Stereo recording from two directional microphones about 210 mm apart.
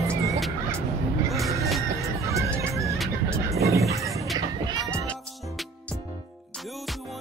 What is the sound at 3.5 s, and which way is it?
Fowl, 15° right (ahead or behind).